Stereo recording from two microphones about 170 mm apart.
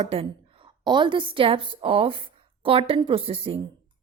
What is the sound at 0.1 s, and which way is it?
A woman's voice, 30° right (ahead or behind).